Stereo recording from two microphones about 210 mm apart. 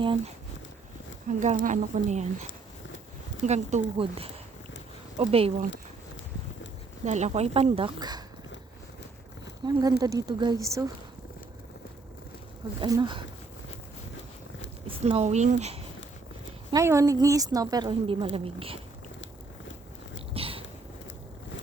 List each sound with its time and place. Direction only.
1.3 s speech: 35° right (ahead or behind)
7.0 s speech: 35° right (ahead or behind)
9.6 s a woman's voice: 20° right (ahead or behind)
12.8 s speech: 20° right (ahead or behind)
14.8 s speech: 30° right (ahead or behind)
16.7 s a woman's voice: 15° right (ahead or behind)
20.1 s a sound: 25° right (ahead or behind)